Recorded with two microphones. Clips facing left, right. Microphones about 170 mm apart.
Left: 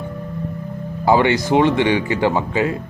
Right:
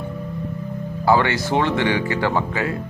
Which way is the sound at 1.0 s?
20° left (ahead or behind).